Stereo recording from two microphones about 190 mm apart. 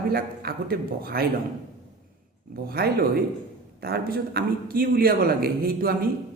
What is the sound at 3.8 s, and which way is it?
A man's voice, 55° right (ahead or behind).